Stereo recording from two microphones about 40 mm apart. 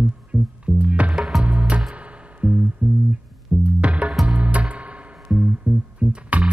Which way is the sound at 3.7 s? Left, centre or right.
Right.